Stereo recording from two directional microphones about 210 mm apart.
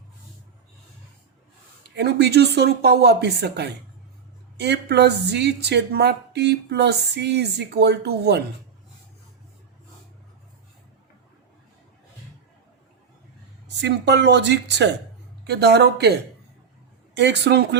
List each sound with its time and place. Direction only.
2.0 s a woman's voice: 50° right (ahead or behind)
13.8 s a woman's voice: 55° right (ahead or behind)
17.2 s a woman's voice: 55° right (ahead or behind)